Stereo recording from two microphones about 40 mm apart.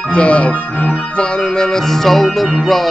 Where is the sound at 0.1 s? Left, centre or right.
Left.